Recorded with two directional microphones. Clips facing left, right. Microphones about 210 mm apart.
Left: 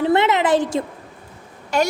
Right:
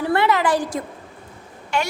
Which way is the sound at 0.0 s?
20° left (ahead or behind).